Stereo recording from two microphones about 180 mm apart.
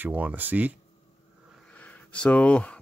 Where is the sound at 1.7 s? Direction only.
10° left (ahead or behind).